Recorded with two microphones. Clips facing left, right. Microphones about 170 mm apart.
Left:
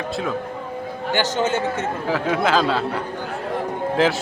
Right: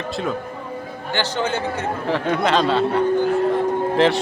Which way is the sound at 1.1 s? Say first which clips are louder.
Left 2 dB; 20° left (ahead or behind).